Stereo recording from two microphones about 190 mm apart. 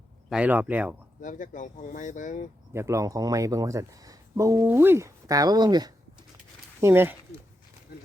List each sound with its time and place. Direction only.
0.3 s speech: 5° right (ahead or behind)
1.2 s speech: 40° left (ahead or behind)
2.7 s speech: 15° right (ahead or behind)